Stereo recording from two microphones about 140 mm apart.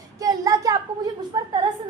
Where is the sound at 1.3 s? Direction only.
35° right (ahead or behind).